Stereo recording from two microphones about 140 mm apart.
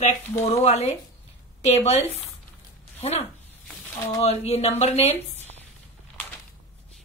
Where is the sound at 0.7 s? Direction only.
50° left (ahead or behind).